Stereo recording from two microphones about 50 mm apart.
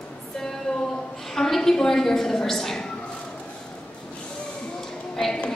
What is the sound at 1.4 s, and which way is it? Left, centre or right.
A woman's voice, centre.